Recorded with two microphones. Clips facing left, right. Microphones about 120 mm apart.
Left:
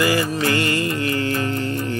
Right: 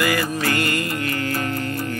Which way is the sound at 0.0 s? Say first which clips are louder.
Left 2 dB; 25° left (ahead or behind).